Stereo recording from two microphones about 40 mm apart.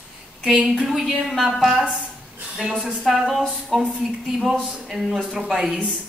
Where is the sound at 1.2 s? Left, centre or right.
Centre.